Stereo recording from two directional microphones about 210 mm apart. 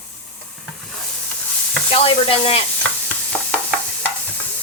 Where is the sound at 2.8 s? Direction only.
5° left (ahead or behind).